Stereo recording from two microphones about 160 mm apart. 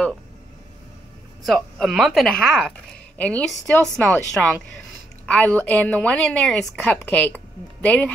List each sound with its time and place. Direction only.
1.4 s a woman's voice: centre (ahead or behind)